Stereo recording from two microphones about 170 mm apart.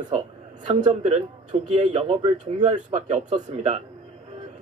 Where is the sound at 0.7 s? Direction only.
35° right (ahead or behind).